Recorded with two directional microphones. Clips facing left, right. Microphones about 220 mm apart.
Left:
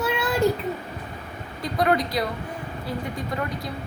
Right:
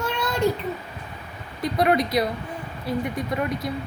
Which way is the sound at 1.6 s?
20° right (ahead or behind).